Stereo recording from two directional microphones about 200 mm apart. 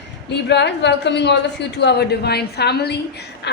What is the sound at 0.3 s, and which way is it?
A woman's voice, 60° left (ahead or behind).